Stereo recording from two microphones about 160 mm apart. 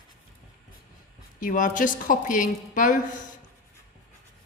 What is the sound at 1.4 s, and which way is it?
A woman's voice, 55° left (ahead or behind).